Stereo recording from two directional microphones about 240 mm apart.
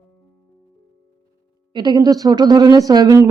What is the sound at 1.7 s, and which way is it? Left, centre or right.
Speech, centre.